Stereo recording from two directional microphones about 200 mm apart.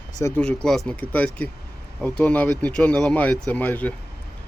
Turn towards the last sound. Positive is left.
turn(degrees=10)  # may be behind; listen again after turning